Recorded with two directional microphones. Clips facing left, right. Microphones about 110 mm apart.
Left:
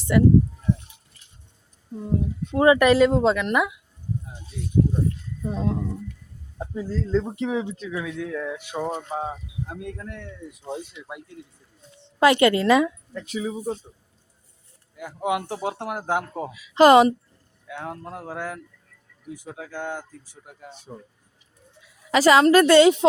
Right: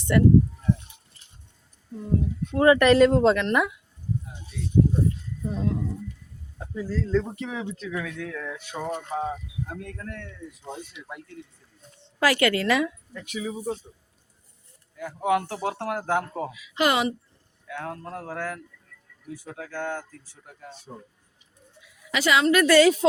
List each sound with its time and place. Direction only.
0.1 s speech: 10° left (ahead or behind)
1.9 s speech: 20° left (ahead or behind)
5.5 s speech: 30° left (ahead or behind); by 11.1 s 10° left (ahead or behind)
12.2 s speech: 25° left (ahead or behind)
13.2 s speech: 35° left (ahead or behind)
14.9 s speech: 20° left (ahead or behind)
16.5 s speech: 35° left (ahead or behind)
17.7 s speech: 15° left (ahead or behind)
21.9 s a woman's voice: 40° left (ahead or behind)
22.6 s speech: 25° left (ahead or behind)